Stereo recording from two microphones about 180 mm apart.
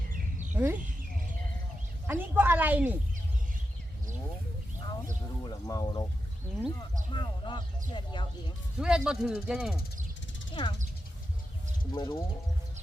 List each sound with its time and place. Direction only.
0.5 s speech: 10° right (ahead or behind)
2.0 s speech: 10° right (ahead or behind)
5.4 s speech: 20° left (ahead or behind)
7.1 s speech: 25° left (ahead or behind)
8.8 s speech: 5° right (ahead or behind)
10.5 s speech: 25° left (ahead or behind)
11.9 s speech: 25° left (ahead or behind)